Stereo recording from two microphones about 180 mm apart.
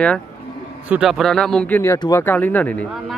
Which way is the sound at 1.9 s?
25° left (ahead or behind).